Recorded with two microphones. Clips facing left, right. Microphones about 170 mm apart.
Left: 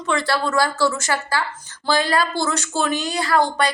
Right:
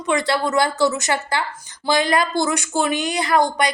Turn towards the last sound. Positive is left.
turn(degrees=-15)  # may be behind; listen again after turning